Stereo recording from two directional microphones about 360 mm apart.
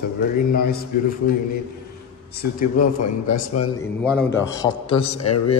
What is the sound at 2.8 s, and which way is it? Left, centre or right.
Speech, left.